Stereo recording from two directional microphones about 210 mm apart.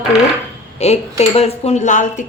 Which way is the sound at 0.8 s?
30° left (ahead or behind).